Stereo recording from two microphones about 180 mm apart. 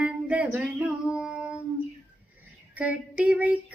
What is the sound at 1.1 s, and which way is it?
Child singing, 5° right (ahead or behind).